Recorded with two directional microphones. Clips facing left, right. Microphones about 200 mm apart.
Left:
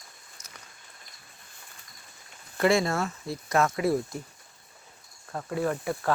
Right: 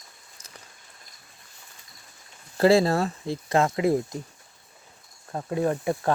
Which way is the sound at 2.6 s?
30° right (ahead or behind).